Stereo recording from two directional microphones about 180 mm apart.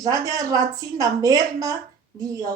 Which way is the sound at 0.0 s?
20° right (ahead or behind).